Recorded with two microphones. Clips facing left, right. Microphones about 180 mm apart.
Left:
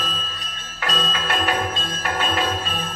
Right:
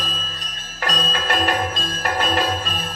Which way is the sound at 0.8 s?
40° right (ahead or behind).